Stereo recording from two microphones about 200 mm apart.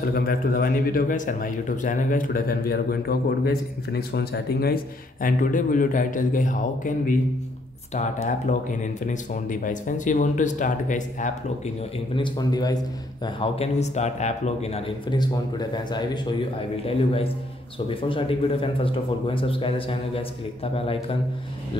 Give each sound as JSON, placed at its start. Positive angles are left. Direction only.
{"t": 0.1, "sound": "a man's voice", "side_deg": 45}
{"t": 5.2, "sound": "speech", "side_deg": 40}
{"t": 12.2, "sound": "a man's voice", "side_deg": 20}